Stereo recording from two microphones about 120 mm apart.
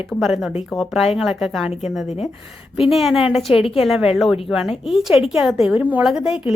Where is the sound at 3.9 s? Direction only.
5° right (ahead or behind).